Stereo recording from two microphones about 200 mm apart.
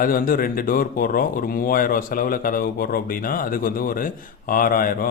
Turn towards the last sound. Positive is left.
turn(degrees=45)  # may be behind; listen again after turning